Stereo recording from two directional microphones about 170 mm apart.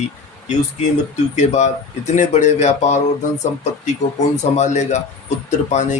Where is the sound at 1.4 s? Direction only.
45° left (ahead or behind).